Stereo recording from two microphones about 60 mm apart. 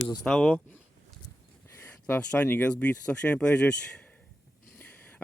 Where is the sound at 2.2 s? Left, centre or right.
Left.